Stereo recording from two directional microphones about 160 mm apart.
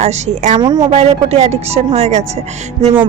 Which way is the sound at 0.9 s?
40° right (ahead or behind).